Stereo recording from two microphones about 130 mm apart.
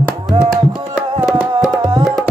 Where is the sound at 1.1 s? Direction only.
5° right (ahead or behind).